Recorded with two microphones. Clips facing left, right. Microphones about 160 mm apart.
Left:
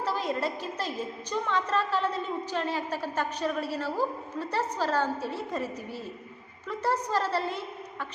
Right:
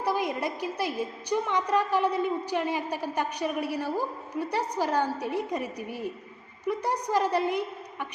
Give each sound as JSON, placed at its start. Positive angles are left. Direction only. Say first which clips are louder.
{"t": 0.0, "sound": "a woman's voice", "louder": "right 1 dB", "side_deg": -15}